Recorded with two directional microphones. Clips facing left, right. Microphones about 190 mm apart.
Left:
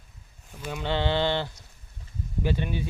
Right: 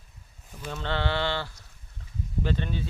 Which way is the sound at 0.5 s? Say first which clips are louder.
Left 2 dB; 10° left (ahead or behind).